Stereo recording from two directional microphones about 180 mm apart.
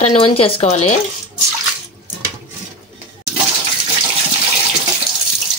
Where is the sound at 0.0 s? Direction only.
30° left (ahead or behind).